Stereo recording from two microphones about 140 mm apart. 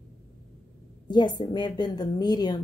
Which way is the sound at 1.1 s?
30° left (ahead or behind).